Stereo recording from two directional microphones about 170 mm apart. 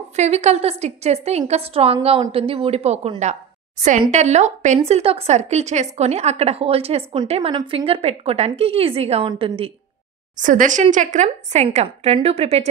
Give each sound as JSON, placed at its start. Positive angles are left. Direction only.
{"t": 0.1, "sound": "a woman's voice", "side_deg": -40}
{"t": 10.3, "sound": "a woman's voice", "side_deg": -50}